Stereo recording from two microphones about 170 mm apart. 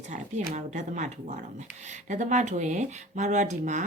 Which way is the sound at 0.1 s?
45° right (ahead or behind).